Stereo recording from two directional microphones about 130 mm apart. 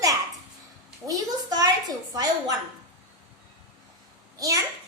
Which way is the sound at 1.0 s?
30° right (ahead or behind).